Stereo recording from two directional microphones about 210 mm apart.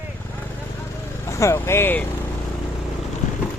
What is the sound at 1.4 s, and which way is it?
Speech, 10° left (ahead or behind).